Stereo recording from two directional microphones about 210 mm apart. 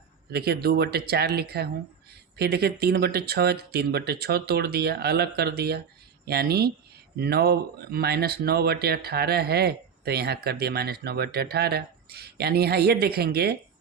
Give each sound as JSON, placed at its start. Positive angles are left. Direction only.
{"t": 0.3, "sound": "speech", "side_deg": -50}